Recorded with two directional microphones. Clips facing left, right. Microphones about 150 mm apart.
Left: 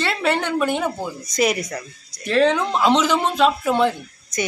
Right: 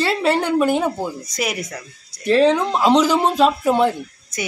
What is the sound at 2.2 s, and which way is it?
Speech, 35° right (ahead or behind).